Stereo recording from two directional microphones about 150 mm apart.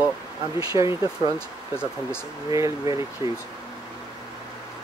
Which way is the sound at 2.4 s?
20° right (ahead or behind).